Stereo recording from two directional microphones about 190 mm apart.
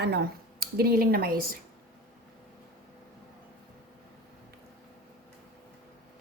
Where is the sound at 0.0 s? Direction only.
60° right (ahead or behind).